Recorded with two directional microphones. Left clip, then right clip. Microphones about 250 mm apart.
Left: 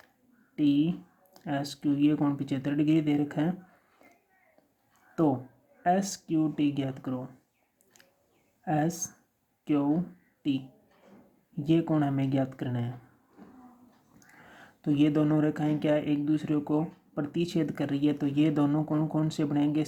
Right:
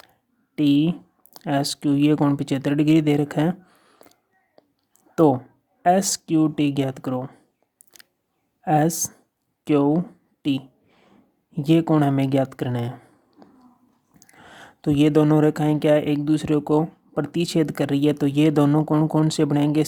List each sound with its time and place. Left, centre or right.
0.5 s speech: right
5.1 s speech: right
7.9 s a sound: right
8.6 s speech: right
14.2 s speech: right